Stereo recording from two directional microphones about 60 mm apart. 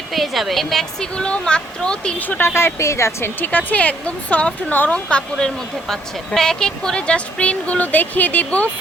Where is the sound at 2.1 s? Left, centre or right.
Left.